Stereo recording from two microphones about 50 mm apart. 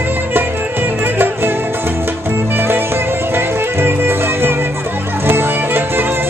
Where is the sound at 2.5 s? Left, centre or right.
Right.